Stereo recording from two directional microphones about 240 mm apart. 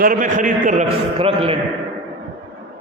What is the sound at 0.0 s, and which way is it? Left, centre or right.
A man's voice, right.